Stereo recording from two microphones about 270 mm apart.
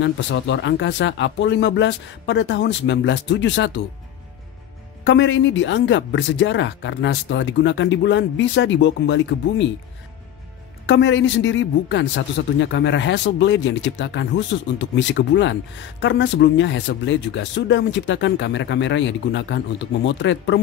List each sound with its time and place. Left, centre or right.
0.0 s speech: left
5.0 s speech: left
10.9 s speech: left